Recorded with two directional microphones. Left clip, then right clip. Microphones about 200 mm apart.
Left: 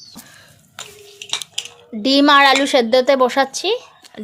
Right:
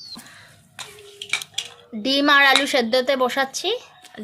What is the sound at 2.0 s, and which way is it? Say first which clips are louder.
Speech: left 4 dB; 25° left (ahead or behind).